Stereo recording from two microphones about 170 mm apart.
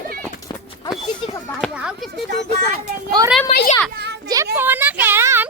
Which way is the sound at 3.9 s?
80° right.